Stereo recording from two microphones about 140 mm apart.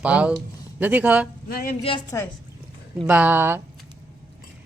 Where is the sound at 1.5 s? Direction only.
90° left.